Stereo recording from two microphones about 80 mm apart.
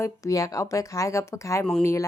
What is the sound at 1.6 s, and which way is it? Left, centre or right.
Speech, centre.